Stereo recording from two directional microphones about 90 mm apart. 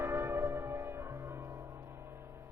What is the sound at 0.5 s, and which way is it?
Music, 25° right (ahead or behind).